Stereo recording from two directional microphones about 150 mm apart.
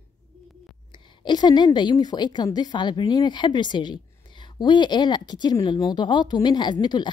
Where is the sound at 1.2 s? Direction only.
30° left (ahead or behind).